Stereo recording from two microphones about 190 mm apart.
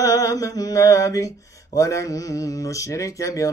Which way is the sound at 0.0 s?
20° left (ahead or behind).